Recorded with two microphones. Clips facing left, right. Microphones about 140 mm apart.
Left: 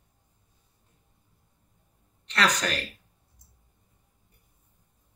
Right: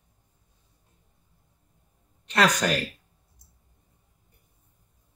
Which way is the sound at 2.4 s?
55° right (ahead or behind).